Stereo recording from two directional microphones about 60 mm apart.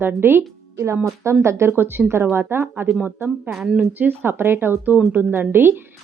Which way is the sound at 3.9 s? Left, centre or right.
Right.